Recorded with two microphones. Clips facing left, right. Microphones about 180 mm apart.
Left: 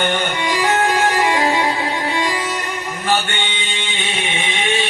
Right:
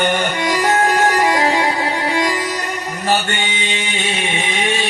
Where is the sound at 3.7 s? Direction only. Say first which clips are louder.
Right 3 dB; 40° right (ahead or behind).